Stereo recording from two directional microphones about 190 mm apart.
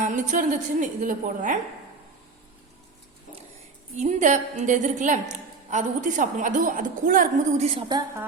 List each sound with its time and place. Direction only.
0.0 s a woman's voice: 40° right (ahead or behind)
4.0 s a woman's voice: 40° right (ahead or behind); by 8.2 s 25° right (ahead or behind)